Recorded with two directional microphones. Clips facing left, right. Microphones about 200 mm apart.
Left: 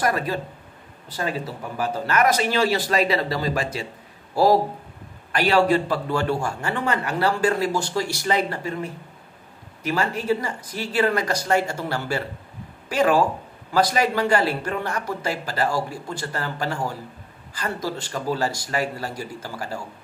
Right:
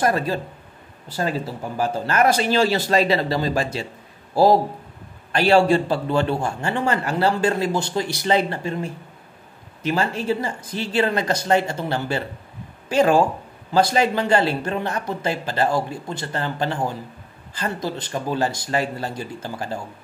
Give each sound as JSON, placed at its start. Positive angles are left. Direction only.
{"t": 0.0, "sound": "a man's voice", "side_deg": -30}
{"t": 1.8, "sound": "a man's voice", "side_deg": -30}
{"t": 5.3, "sound": "a man's voice", "side_deg": -30}